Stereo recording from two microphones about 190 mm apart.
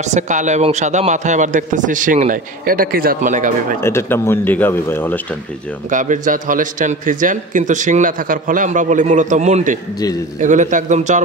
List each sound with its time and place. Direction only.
0.0 s a man's voice: 40° right (ahead or behind)
3.8 s speech: 15° left (ahead or behind)
5.9 s a man's voice: 40° right (ahead or behind)